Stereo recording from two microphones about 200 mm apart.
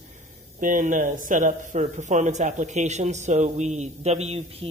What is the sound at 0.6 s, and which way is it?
A man's voice, 40° right (ahead or behind).